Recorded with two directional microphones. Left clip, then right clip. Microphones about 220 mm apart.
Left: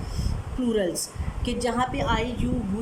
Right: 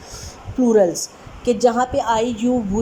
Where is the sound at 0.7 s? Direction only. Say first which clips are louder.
Right 11 dB; 15° right (ahead or behind).